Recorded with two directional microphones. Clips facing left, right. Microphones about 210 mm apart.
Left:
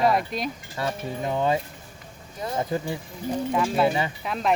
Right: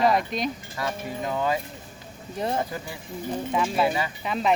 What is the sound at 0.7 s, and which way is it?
Speech, 25° left (ahead or behind).